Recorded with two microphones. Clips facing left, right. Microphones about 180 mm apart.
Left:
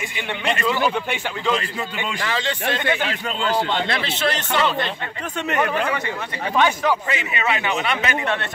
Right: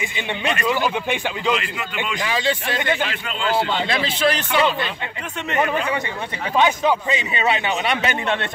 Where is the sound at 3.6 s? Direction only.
10° right (ahead or behind).